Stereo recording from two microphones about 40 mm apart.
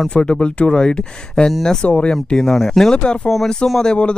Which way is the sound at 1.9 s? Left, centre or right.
Left.